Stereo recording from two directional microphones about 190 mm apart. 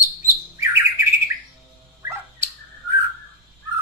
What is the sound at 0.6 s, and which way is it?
Bird, 15° right (ahead or behind).